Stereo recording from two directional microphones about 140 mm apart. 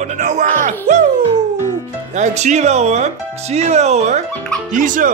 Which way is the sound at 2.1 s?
55° right (ahead or behind).